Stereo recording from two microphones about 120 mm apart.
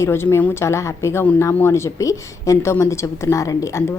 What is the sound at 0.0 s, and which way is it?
A woman's voice, 20° left (ahead or behind).